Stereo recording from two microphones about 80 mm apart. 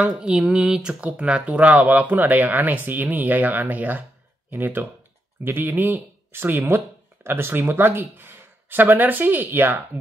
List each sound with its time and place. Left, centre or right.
0.0 s speech: centre